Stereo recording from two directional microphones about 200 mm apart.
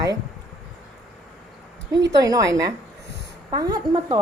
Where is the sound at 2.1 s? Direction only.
20° right (ahead or behind).